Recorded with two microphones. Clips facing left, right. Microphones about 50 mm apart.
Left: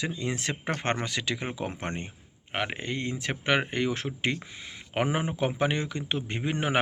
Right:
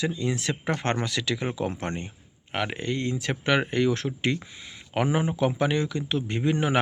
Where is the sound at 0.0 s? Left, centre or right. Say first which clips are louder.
Right 4 dB; left.